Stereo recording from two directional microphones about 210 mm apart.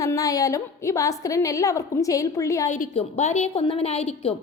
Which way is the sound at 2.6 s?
35° left (ahead or behind).